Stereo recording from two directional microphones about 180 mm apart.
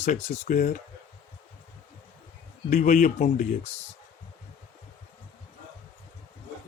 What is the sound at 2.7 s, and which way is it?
Speech, 45° left (ahead or behind).